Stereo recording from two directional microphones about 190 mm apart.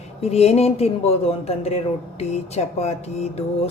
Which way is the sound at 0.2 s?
35° left (ahead or behind).